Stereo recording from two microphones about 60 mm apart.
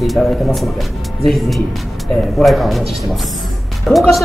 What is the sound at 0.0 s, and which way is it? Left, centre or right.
A man's voice, centre.